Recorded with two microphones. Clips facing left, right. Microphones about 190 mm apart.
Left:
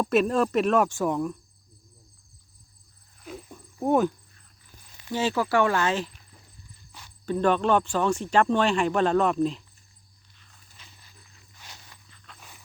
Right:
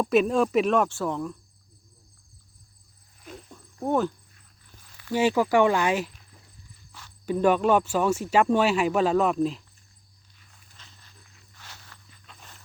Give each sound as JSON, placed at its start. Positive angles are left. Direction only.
{"t": 0.0, "sound": "speech", "side_deg": 0}
{"t": 0.9, "sound": "speech", "side_deg": 15}
{"t": 3.2, "sound": "a sound", "side_deg": 5}
{"t": 3.5, "sound": "cricket", "side_deg": 15}
{"t": 4.9, "sound": "a sound", "side_deg": 20}
{"t": 5.1, "sound": "speech", "side_deg": -15}
{"t": 6.9, "sound": "cricket", "side_deg": 15}
{"t": 7.3, "sound": "speech", "side_deg": -10}
{"t": 10.8, "sound": "a sound", "side_deg": 10}
{"t": 11.5, "sound": "walk", "side_deg": 15}
{"t": 12.2, "sound": "walk", "side_deg": 0}